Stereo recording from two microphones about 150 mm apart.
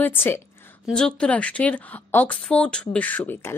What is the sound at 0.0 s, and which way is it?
A woman's voice, 15° left (ahead or behind).